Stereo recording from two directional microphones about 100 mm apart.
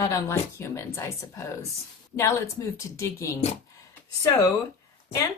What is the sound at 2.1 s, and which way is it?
A woman's voice, 30° left (ahead or behind).